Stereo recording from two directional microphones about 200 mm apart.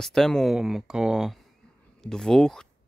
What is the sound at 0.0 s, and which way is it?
Speech, centre (ahead or behind).